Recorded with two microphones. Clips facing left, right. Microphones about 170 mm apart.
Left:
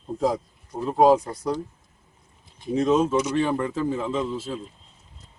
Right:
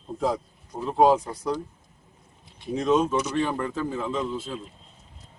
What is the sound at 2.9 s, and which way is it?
Speech, 5° left (ahead or behind).